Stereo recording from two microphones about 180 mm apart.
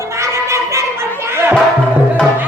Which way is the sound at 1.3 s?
15° right (ahead or behind).